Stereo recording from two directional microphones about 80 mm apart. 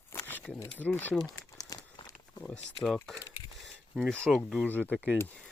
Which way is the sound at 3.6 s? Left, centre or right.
Centre.